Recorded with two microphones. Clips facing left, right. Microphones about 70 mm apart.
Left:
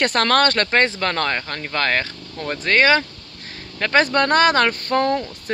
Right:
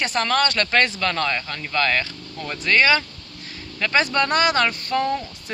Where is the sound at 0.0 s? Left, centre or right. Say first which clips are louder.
Left 4 dB; left.